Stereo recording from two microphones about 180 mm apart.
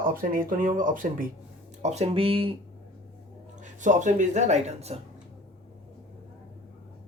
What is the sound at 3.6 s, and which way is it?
A woman's voice, 45° right (ahead or behind).